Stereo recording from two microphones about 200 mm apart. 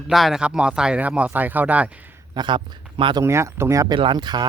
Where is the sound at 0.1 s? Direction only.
Centre (ahead or behind).